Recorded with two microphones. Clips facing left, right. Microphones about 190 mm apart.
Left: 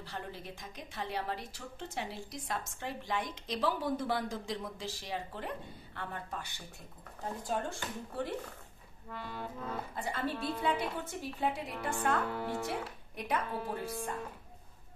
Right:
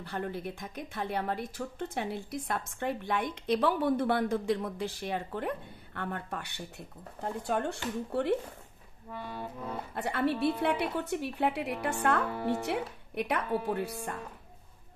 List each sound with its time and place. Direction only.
0.0 s speech: 55° right (ahead or behind)
9.1 s accordion: 15° right (ahead or behind)
9.9 s speech: 70° right (ahead or behind)